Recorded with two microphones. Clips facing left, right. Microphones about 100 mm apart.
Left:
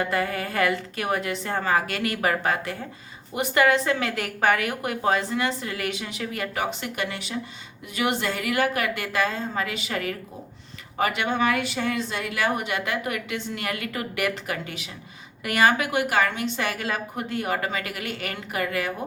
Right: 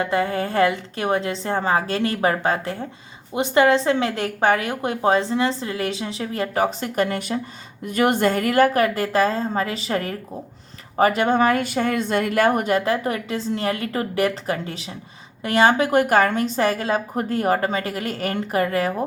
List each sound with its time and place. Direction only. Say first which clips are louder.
0.0 s a woman's voice: right 4 dB; 25° right (ahead or behind)
15.9 s a woman's voice: right 6 dB; 45° right (ahead or behind)